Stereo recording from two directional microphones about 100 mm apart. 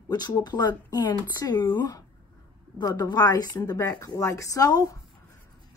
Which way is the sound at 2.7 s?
45° left (ahead or behind).